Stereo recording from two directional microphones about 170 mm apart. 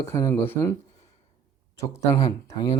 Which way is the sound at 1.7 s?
20° left (ahead or behind).